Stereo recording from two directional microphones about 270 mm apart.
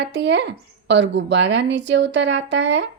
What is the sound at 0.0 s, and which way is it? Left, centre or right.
Speech, right.